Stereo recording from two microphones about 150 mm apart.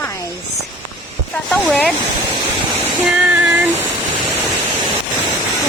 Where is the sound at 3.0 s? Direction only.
5° right (ahead or behind).